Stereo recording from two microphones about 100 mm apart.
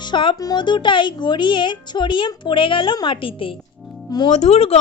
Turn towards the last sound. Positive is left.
turn(degrees=90)